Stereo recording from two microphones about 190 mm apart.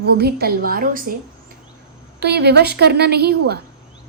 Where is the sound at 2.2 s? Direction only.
60° right (ahead or behind).